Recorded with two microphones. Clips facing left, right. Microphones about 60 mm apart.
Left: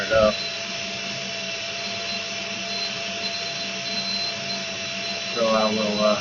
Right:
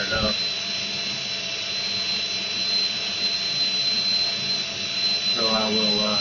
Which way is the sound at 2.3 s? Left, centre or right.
Left.